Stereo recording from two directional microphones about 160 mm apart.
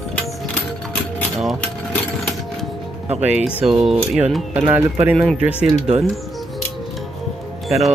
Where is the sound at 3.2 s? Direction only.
5° right (ahead or behind).